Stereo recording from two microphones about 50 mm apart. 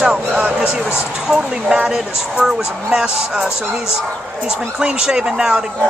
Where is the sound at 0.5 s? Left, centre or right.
Centre.